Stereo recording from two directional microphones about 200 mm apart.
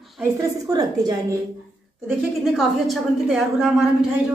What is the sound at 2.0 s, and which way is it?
A woman's voice, centre (ahead or behind).